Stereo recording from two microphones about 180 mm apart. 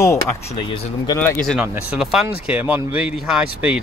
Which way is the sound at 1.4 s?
Centre (ahead or behind).